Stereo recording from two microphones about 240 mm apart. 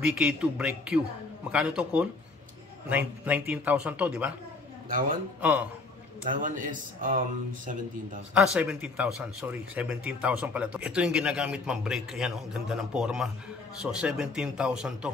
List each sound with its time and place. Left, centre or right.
0.0 s speech: centre
4.8 s a man's voice: right
5.4 s speech: centre
6.2 s speech: right
8.4 s speech: centre